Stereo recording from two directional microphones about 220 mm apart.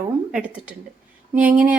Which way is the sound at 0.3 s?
5° right (ahead or behind).